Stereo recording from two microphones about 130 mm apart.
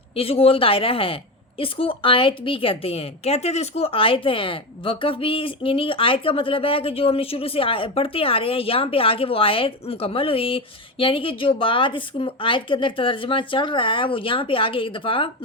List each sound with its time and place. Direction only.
0.2 s a woman's voice: 45° left (ahead or behind)